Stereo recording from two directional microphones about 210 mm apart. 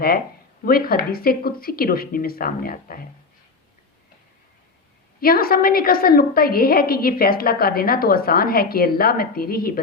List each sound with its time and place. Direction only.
0.6 s a woman's voice: 45° left (ahead or behind)
5.2 s a woman's voice: 45° left (ahead or behind)